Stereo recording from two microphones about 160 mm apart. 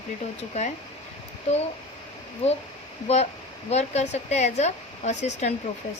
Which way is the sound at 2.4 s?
40° left (ahead or behind).